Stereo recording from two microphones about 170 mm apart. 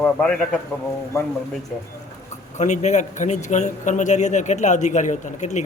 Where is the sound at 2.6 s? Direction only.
45° left (ahead or behind).